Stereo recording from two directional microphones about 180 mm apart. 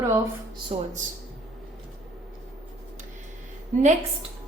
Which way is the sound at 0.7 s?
35° right (ahead or behind).